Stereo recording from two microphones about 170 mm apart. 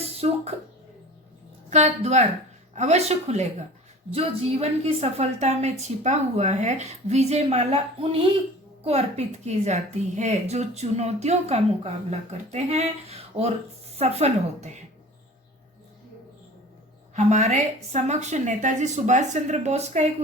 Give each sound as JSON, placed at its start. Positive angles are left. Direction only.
{"t": 0.0, "sound": "a sound", "side_deg": -35}
{"t": 1.7, "sound": "a woman's voice", "side_deg": -40}
{"t": 17.2, "sound": "a woman's voice", "side_deg": -40}